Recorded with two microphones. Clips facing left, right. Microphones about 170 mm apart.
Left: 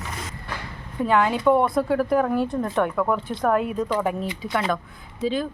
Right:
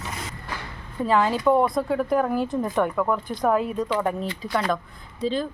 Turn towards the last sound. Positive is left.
turn(degrees=5)  # may be behind; listen again after turning